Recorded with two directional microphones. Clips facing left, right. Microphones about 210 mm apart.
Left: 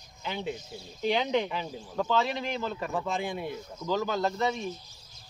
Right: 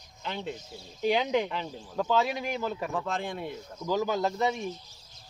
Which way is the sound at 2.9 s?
5° left (ahead or behind).